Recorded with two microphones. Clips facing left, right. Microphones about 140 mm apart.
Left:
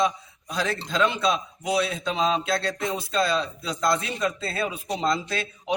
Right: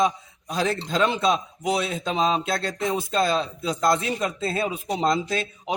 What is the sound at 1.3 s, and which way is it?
Speech, 30° right (ahead or behind).